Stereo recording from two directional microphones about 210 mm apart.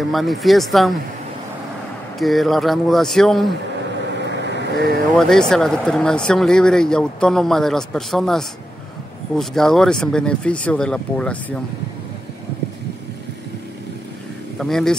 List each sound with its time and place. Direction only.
0.1 s speech: centre (ahead or behind)
2.1 s speech: centre (ahead or behind)
4.2 s vehicle: 55° right (ahead or behind)
5.1 s speech: 5° left (ahead or behind)
14.6 s a man's voice: centre (ahead or behind)